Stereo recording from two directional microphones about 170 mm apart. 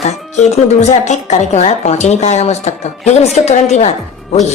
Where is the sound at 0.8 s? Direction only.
40° left (ahead or behind).